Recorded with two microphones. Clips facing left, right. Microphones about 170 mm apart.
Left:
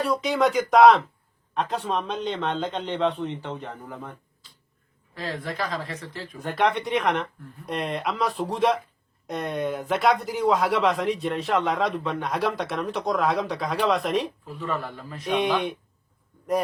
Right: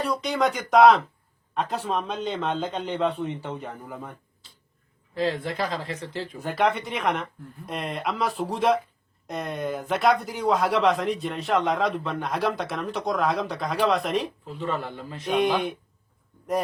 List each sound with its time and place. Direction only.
0.0 s speech: centre (ahead or behind)
5.1 s speech: 30° right (ahead or behind)
6.4 s speech: centre (ahead or behind)
14.5 s speech: 25° right (ahead or behind)
15.3 s speech: centre (ahead or behind)